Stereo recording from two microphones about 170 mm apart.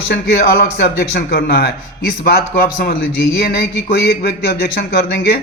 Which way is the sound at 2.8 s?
70° left (ahead or behind).